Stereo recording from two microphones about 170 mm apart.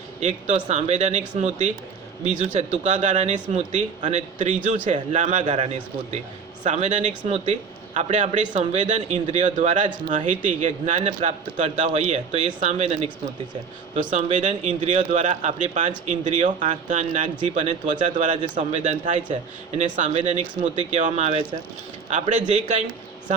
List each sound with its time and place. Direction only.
0.2 s speech: 45° right (ahead or behind)
13.9 s speech: 45° right (ahead or behind)